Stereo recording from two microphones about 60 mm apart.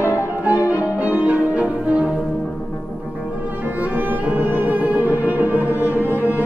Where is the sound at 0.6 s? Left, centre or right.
Left.